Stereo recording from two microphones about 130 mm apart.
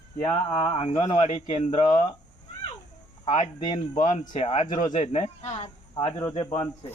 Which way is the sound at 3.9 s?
80° left.